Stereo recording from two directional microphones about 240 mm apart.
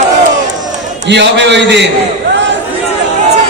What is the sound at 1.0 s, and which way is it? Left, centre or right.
Speech, right.